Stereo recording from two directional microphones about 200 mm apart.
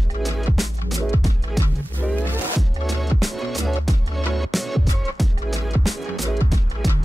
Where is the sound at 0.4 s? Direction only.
Centre (ahead or behind).